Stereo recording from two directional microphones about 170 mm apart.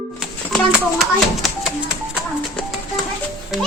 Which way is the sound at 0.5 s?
5° right (ahead or behind).